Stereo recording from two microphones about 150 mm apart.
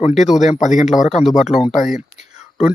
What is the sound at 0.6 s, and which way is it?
Speech, 55° left (ahead or behind).